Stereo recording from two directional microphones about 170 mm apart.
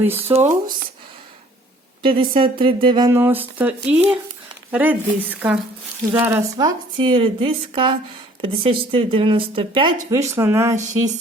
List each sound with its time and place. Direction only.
0.0 s a woman's voice: 15° right (ahead or behind)
2.0 s speech: 30° right (ahead or behind)
3.1 s a woman's voice: 15° right (ahead or behind); by 9.9 s 30° right (ahead or behind)
10.1 s a woman's voice: 15° right (ahead or behind)